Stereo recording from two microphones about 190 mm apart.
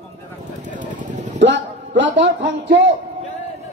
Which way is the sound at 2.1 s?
70° right (ahead or behind).